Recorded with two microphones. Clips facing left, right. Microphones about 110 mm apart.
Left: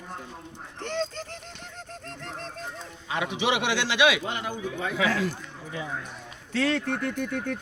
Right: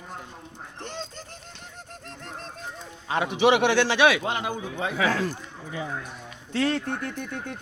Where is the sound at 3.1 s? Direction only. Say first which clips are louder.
Right 6 dB; 40° right (ahead or behind).